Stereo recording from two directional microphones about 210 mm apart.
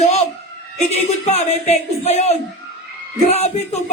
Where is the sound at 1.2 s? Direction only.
30° left (ahead or behind).